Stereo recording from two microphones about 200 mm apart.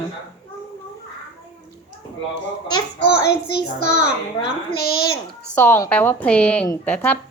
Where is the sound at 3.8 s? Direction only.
40° right (ahead or behind).